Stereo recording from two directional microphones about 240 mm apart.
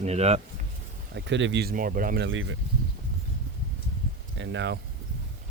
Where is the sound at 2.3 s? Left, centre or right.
Right.